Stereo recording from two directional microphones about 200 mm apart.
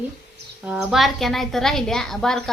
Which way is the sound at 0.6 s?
5° right (ahead or behind).